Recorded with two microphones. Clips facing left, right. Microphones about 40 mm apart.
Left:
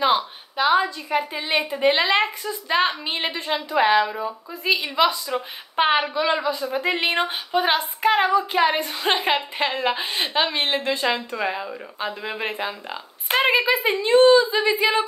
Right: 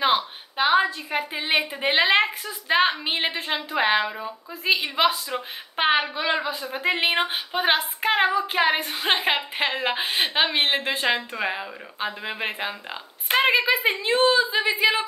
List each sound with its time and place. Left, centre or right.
0.0 s a sound: centre
1.1 s a woman's voice: right
1.9 s speech: right
4.1 s a woman's voice: centre
4.9 s a woman's voice: right
5.3 s a woman's voice: centre; by 11.2 s right
11.3 s speech: centre